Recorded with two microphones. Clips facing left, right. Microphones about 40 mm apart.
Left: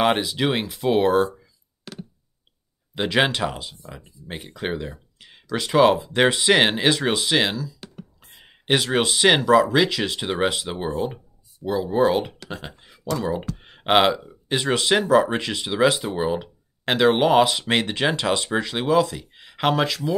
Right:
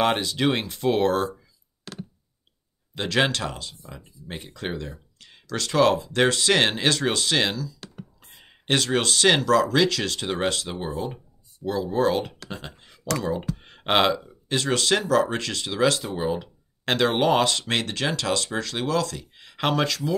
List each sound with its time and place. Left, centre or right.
0.0 s speech: centre
1.9 s a sound: centre
2.9 s speech: centre